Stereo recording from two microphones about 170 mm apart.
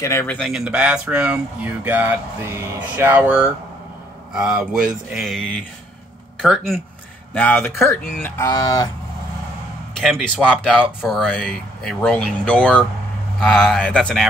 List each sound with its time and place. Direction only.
0.0 s a man's voice: 15° left (ahead or behind)
0.4 s a man's voice: 5° right (ahead or behind); by 8.8 s 25° left (ahead or behind)
9.9 s speech: centre (ahead or behind)